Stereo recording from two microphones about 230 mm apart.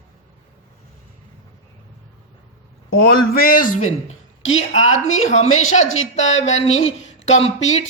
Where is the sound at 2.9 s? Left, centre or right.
Left.